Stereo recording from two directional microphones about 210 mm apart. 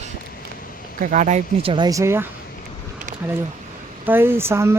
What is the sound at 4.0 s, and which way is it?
Speech, 10° right (ahead or behind).